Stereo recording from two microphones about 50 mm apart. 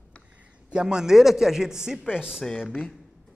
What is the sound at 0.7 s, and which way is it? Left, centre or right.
Speech, centre.